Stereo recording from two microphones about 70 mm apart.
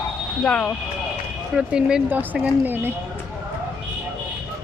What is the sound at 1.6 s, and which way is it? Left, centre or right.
Speech, centre.